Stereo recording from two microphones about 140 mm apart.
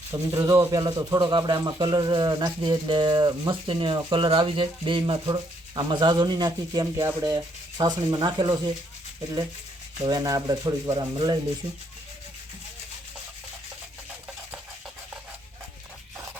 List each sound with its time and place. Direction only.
0.1 s speech: 25° right (ahead or behind)
10.0 s speech: 25° right (ahead or behind)